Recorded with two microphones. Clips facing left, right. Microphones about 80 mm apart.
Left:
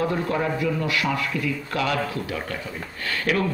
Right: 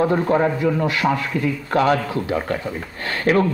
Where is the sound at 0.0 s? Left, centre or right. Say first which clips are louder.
Right 7 dB; right.